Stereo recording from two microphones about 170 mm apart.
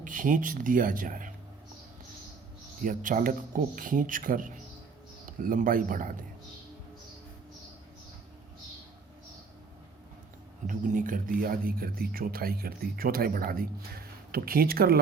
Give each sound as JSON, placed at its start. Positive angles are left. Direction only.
{"t": 0.0, "sound": "speech", "side_deg": -50}
{"t": 2.8, "sound": "speech", "side_deg": -50}
{"t": 10.7, "sound": "speech", "side_deg": -50}